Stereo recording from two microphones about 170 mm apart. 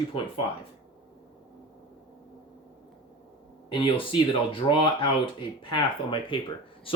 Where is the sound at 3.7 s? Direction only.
30° left (ahead or behind).